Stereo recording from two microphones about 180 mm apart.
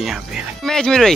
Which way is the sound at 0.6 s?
5° left (ahead or behind).